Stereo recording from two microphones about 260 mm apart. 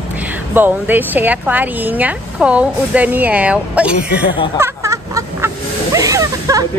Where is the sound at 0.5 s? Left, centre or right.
Centre.